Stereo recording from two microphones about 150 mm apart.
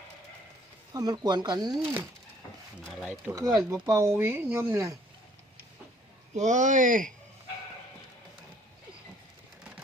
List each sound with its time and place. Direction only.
0.9 s speech: 25° right (ahead or behind)
2.8 s speech: centre (ahead or behind)
3.3 s speech: 20° right (ahead or behind)
6.3 s speech: 55° right (ahead or behind)